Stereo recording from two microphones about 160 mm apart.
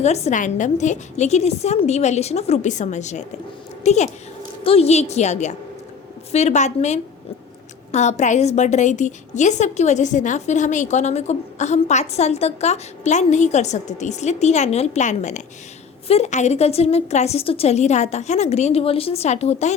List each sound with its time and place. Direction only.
0.0 s a woman's voice: 45° left (ahead or behind)